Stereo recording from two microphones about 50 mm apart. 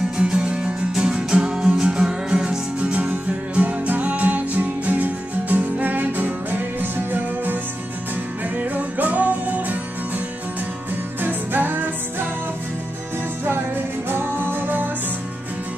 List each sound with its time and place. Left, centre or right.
0.2 s music: centre; by 7.5 s right
8.5 s music: right
14.0 s music: right